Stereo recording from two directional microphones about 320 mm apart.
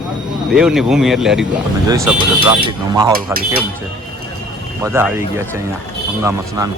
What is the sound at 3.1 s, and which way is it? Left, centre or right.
Speech, right.